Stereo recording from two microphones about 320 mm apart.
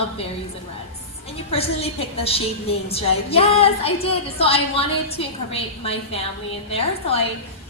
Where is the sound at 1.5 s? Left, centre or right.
Centre.